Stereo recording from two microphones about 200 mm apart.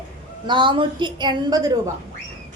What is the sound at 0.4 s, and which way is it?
A woman's voice, 25° right (ahead or behind).